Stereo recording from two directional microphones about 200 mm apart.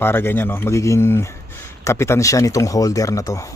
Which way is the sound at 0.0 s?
10° left (ahead or behind).